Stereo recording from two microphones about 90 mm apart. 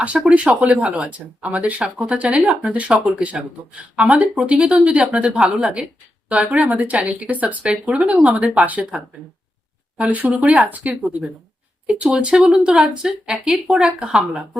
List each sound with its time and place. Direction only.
0.3 s speech: 15° right (ahead or behind)
10.0 s speech: 15° right (ahead or behind)